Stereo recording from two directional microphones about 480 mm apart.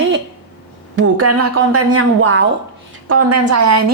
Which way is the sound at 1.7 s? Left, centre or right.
Right.